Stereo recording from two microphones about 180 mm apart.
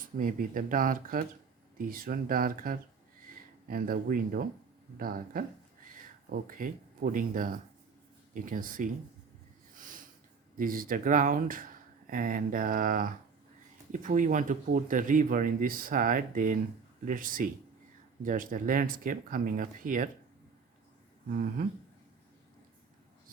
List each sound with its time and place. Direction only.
0.2 s speech: 50° right (ahead or behind)
9.7 s a sound: 50° right (ahead or behind)
10.6 s speech: 50° right (ahead or behind)